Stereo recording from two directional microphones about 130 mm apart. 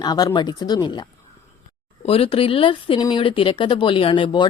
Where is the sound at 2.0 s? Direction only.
50° left (ahead or behind).